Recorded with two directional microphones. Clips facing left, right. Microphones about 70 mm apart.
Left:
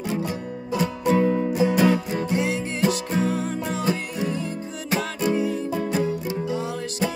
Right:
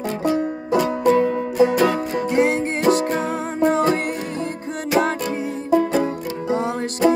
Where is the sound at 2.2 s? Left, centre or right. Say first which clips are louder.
Right 6 dB; right.